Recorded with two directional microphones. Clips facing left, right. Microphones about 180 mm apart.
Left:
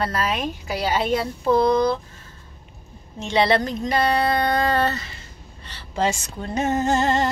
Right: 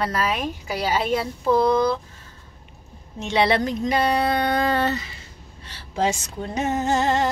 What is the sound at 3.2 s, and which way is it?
A woman's voice, 15° right (ahead or behind).